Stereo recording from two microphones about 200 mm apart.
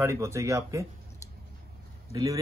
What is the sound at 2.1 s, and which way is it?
Speech, 15° right (ahead or behind).